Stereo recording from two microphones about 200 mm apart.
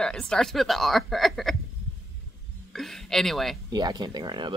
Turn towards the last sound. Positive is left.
turn(degrees=-20)  # may be behind; listen again after turning